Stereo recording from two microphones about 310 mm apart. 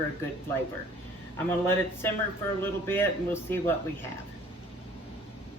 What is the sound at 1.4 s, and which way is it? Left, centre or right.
Speech, centre.